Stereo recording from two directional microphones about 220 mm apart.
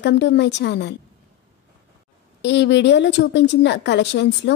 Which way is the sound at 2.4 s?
55° left (ahead or behind).